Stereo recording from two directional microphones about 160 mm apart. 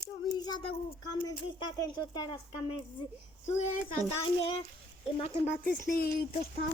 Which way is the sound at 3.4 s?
50° left (ahead or behind).